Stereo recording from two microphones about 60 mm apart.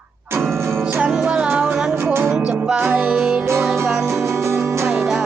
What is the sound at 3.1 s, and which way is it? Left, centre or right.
Music, centre.